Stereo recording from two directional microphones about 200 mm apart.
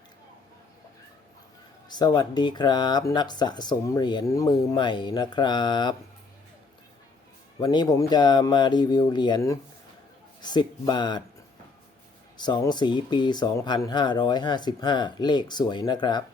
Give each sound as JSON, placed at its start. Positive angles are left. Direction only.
{"t": 1.9, "sound": "speech", "side_deg": 20}
{"t": 7.6, "sound": "speech", "side_deg": 20}
{"t": 12.4, "sound": "speech", "side_deg": 20}